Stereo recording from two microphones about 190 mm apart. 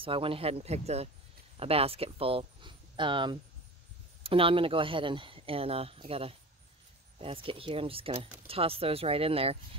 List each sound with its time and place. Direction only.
0.0 s speech: 30° right (ahead or behind)